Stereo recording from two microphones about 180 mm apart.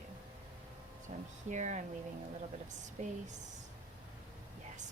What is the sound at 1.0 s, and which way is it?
Speech, 40° right (ahead or behind).